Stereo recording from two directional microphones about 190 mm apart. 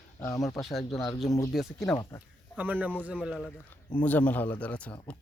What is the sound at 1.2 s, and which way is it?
Speech, 20° left (ahead or behind).